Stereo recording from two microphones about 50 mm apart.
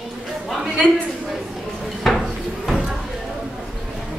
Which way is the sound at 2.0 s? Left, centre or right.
Centre.